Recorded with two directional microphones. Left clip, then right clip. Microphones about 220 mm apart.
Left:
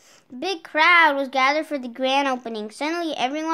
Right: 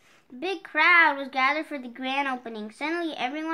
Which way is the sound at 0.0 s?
50° left (ahead or behind).